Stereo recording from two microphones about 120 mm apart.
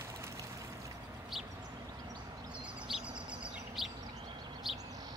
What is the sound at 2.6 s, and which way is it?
Chirp, 10° right (ahead or behind).